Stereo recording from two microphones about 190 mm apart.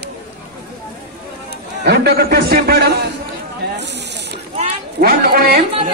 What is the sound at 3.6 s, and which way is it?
Snake, 60° right (ahead or behind).